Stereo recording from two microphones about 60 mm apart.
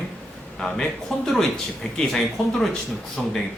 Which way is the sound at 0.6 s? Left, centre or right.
Centre.